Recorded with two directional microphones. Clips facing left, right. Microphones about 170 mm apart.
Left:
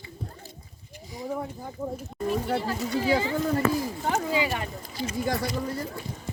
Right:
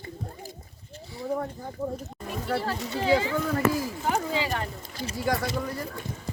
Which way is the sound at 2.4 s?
20° left (ahead or behind).